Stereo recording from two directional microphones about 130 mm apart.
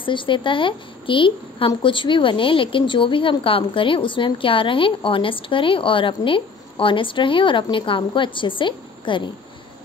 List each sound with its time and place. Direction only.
0.0 s a woman's voice: 40° left (ahead or behind)